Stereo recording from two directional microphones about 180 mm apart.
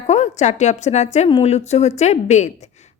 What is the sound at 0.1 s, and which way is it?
A woman's voice, 40° left (ahead or behind).